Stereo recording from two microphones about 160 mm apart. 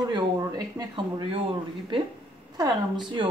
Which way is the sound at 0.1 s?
25° right (ahead or behind).